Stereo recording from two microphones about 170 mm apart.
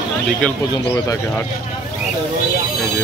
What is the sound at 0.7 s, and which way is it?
Speech, 20° left (ahead or behind).